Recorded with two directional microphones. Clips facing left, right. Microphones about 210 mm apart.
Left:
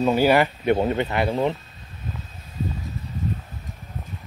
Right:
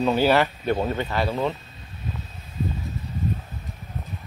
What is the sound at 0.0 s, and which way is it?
Speech, 10° left (ahead or behind).